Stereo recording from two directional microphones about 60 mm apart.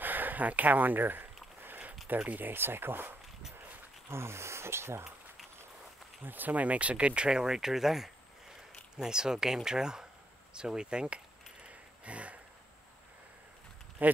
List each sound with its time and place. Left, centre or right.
0.0 s a sound: right
2.1 s speech: right
4.1 s speech: right
6.2 s speech: right
11.6 s a sound: right
14.0 s speech: right